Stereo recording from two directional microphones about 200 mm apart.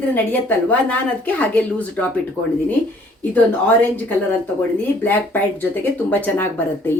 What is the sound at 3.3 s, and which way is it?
Speech, 10° left (ahead or behind).